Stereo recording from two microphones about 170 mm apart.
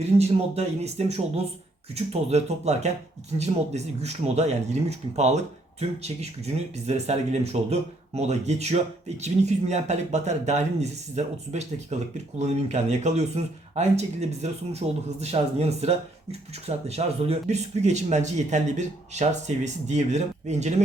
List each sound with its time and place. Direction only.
0.0 s speech: 40° right (ahead or behind)